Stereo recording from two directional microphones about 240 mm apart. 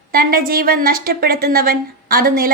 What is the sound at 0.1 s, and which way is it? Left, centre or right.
A woman's voice, right.